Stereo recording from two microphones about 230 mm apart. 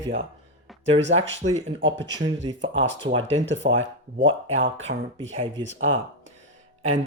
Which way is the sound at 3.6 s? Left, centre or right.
Right.